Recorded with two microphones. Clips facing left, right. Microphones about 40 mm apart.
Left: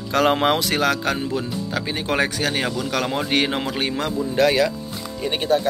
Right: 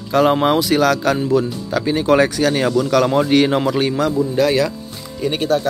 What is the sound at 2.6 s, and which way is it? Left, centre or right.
Speech, centre.